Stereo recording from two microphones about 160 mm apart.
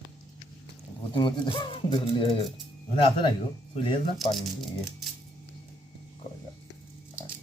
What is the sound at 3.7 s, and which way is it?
Speech, 30° left (ahead or behind).